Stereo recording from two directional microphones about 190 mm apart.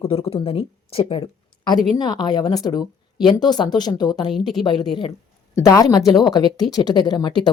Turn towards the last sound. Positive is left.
turn(degrees=20)  # may be behind; listen again after turning